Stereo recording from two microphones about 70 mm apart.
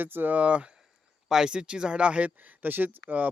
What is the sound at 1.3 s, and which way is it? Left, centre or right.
Speech, centre.